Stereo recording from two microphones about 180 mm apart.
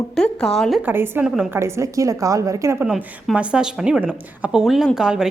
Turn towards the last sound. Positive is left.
turn(degrees=-5)  # may be behind; listen again after turning